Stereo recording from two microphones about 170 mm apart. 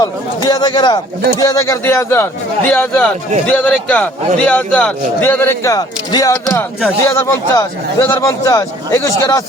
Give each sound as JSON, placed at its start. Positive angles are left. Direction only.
{"t": 0.0, "sound": "a man's voice", "side_deg": 25}